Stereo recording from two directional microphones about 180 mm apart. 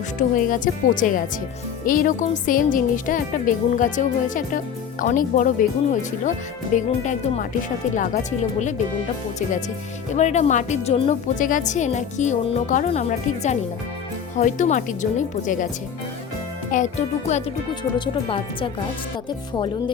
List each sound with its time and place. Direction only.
0.2 s speech: 50° left (ahead or behind)
10.2 s speech: 40° left (ahead or behind)
11.3 s speech: 45° left (ahead or behind)
16.7 s speech: 40° left (ahead or behind)
17.9 s speech: 25° left (ahead or behind)